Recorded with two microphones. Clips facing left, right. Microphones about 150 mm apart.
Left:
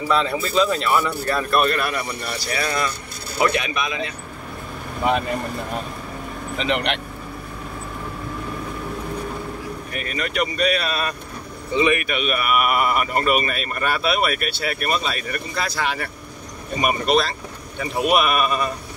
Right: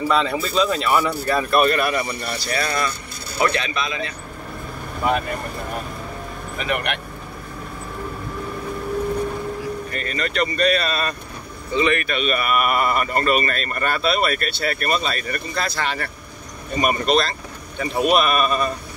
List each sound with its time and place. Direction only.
0.1 s speech: centre (ahead or behind)
2.4 s speech: 10° left (ahead or behind)
6.6 s speech: 25° left (ahead or behind)
9.9 s speech: 10° left (ahead or behind)